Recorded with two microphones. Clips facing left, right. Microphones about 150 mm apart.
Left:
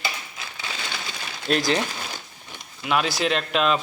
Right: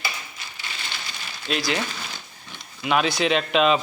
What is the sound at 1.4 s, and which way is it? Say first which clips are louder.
Speech: left 4 dB; 45° left (ahead or behind).